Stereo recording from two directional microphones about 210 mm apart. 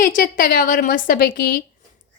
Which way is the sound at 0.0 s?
40° left (ahead or behind).